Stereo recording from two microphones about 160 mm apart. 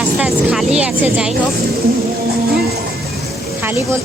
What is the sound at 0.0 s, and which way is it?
Speech, 5° right (ahead or behind).